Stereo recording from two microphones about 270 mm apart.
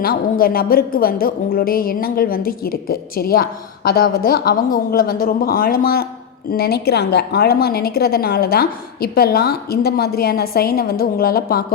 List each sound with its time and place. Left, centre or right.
0.0 s a woman's voice: left